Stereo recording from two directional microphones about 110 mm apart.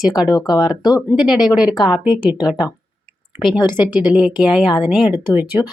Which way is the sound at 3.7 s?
15° right (ahead or behind).